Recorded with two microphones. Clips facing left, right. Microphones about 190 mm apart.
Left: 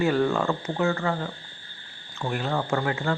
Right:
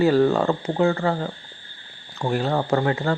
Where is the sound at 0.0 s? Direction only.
35° right (ahead or behind).